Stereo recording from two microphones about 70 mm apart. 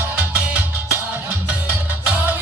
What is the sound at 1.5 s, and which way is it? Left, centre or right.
Music, right.